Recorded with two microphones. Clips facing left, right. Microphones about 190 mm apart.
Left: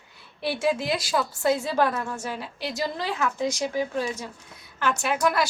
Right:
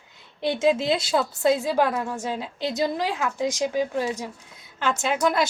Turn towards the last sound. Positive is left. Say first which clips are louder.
# right 1 dB
turn(degrees=-20)  # may be behind; listen again after turning